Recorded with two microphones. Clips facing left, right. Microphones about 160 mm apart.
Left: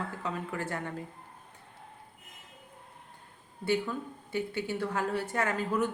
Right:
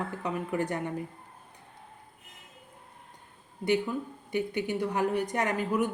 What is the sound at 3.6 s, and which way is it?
A woman's voice, 15° right (ahead or behind).